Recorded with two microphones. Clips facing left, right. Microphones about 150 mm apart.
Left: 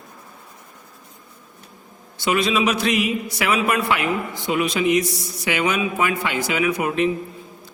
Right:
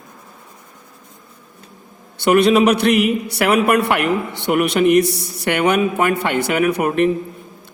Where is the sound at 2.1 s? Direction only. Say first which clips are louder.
Right 8 dB; 65° right (ahead or behind).